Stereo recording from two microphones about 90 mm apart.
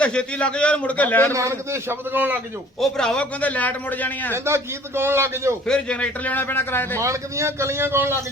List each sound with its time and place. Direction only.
0.0 s a man's voice: 15° left (ahead or behind)
1.3 s a man's voice: 35° right (ahead or behind)
2.8 s a man's voice: 5° left (ahead or behind)
4.4 s a man's voice: 30° right (ahead or behind)
5.6 s a man's voice: 10° left (ahead or behind)
7.0 s a man's voice: 35° right (ahead or behind)